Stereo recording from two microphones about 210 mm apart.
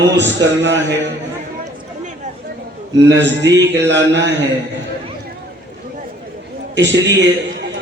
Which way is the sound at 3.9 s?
60° right (ahead or behind).